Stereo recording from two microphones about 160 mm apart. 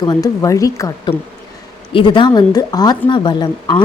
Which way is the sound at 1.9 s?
30° left (ahead or behind).